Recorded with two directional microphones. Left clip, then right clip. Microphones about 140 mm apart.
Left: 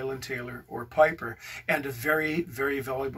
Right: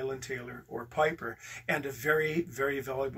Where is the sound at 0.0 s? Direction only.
10° right (ahead or behind).